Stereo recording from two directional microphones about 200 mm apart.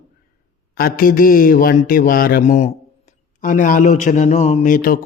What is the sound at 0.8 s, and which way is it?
A man's voice, 50° left (ahead or behind).